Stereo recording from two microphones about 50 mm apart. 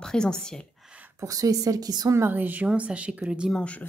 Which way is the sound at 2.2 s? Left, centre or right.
Right.